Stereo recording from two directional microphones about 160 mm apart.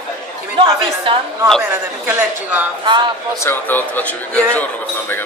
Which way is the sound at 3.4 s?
10° left (ahead or behind).